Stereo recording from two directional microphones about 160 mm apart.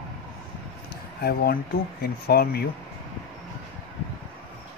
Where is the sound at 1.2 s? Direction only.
70° left (ahead or behind).